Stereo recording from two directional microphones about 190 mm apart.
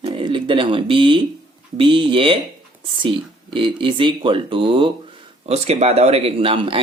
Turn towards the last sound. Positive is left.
turn(degrees=-25)  # may be behind; listen again after turning